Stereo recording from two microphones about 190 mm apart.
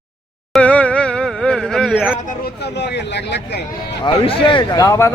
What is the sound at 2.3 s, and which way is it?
Speech, 55° left (ahead or behind).